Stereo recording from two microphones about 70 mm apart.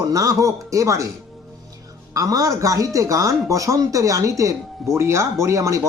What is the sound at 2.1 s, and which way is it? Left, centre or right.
Speech, right.